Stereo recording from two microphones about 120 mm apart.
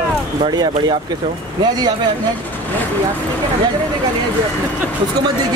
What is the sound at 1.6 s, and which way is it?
Speech, 35° right (ahead or behind).